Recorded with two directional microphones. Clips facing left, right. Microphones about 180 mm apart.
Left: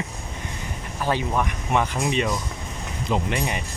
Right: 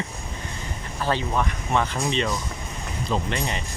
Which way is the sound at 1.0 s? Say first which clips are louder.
Left 1 dB; 10° left (ahead or behind).